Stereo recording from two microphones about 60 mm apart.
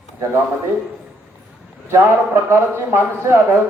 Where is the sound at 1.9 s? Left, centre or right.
Right.